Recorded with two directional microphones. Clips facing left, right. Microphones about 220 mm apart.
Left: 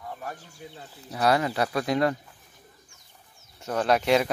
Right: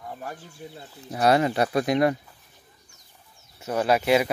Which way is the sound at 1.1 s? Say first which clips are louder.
Right 3 dB; 25° right (ahead or behind).